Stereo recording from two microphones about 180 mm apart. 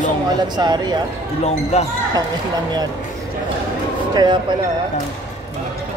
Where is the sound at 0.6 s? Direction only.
25° right (ahead or behind).